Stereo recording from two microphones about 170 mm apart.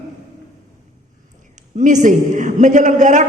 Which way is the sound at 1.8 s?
45° right (ahead or behind).